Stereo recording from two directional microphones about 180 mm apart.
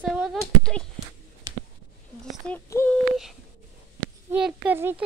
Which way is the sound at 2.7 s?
10° left (ahead or behind).